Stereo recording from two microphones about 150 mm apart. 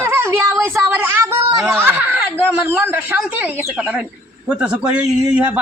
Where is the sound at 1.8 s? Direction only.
10° right (ahead or behind).